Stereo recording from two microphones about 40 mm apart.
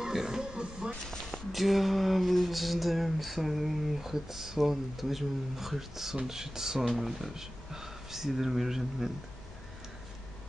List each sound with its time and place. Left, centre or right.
0.0 s music: centre
1.5 s mantra: centre
6.1 s speech: centre